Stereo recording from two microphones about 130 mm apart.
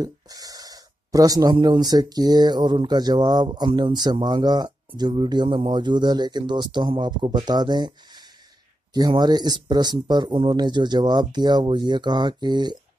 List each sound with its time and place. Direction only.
0.0 s speech: 30° right (ahead or behind)